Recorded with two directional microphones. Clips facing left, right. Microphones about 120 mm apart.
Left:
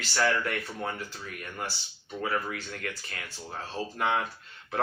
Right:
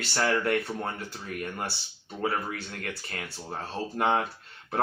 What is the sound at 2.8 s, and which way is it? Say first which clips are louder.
Speech: right 2 dB; 35° right (ahead or behind).